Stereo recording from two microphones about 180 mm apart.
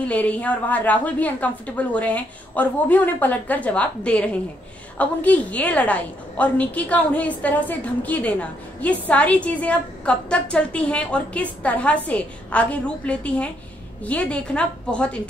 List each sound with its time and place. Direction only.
0.0 s a woman's voice: 5° left (ahead or behind)